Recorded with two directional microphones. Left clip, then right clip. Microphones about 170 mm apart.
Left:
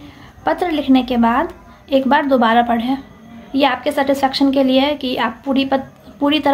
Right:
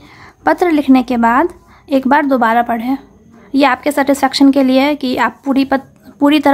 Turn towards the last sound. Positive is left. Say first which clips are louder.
# right 5 dB
turn(degrees=-40)  # may be behind; listen again after turning